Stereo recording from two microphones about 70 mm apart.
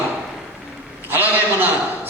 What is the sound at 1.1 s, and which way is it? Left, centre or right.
Speech, right.